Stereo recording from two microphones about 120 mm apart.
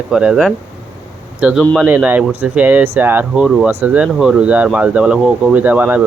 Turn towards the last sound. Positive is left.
turn(degrees=-10)  # may be behind; listen again after turning